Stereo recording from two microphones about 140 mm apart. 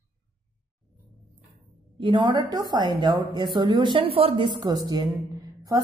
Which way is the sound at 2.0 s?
35° right (ahead or behind).